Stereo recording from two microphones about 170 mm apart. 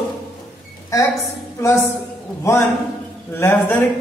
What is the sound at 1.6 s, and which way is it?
Speech, 15° left (ahead or behind).